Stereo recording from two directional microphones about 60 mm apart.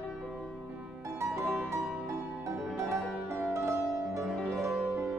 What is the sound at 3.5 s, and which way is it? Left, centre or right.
Music, right.